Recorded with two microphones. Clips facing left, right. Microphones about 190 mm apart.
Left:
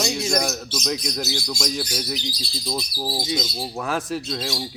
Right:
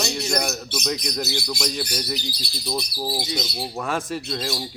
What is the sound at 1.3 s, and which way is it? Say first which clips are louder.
Speech: even; 60° right (ahead or behind).